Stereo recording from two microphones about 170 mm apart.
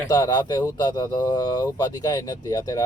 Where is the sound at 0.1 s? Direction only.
25° left (ahead or behind).